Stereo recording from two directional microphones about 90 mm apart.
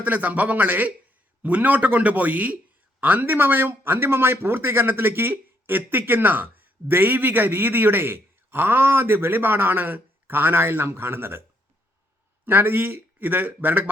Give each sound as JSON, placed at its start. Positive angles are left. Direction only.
{"t": 0.0, "sound": "a man's voice", "side_deg": -20}
{"t": 12.5, "sound": "a man's voice", "side_deg": -25}